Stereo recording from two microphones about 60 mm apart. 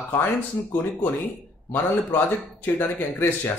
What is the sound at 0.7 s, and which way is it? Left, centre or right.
Speech, left.